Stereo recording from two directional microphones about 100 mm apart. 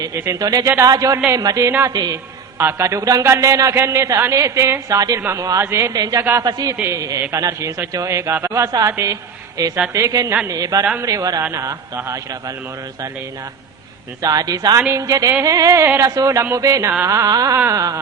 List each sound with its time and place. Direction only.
0.3 s a man's voice: 40° right (ahead or behind)
2.6 s a man's voice: 25° right (ahead or behind)
14.2 s a man's voice: 40° right (ahead or behind)